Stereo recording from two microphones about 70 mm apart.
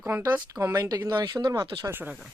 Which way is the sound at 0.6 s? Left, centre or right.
Right.